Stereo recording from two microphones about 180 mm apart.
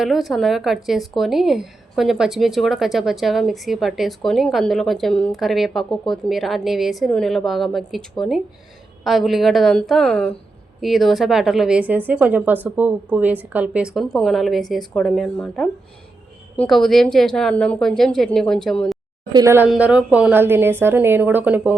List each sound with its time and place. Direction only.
0.0 s a woman's voice: centre (ahead or behind)
19.3 s a woman's voice: 20° right (ahead or behind)
19.6 s a woman's voice: 5° right (ahead or behind)